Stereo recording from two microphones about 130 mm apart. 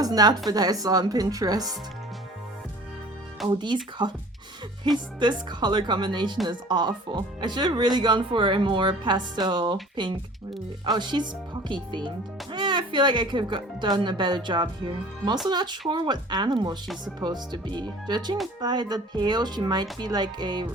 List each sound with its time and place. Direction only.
0.0 s speech: 30° right (ahead or behind)
3.4 s speech: 35° right (ahead or behind)
5.2 s speech: 35° right (ahead or behind)